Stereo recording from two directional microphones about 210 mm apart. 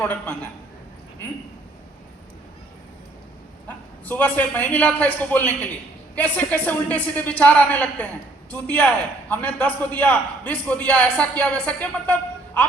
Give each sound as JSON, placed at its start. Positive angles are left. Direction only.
{"t": 0.0, "sound": "a man's voice", "side_deg": 10}
{"t": 4.0, "sound": "a man's voice", "side_deg": 10}